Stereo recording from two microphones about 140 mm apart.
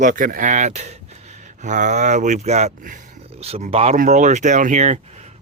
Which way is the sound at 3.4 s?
45° right (ahead or behind).